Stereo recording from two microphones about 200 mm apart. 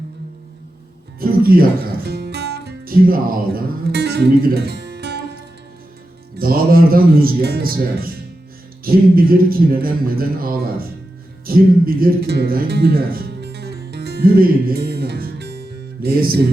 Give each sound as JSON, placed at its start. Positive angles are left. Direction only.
{"t": 1.2, "sound": "music", "side_deg": -45}
{"t": 6.3, "sound": "speech", "side_deg": -45}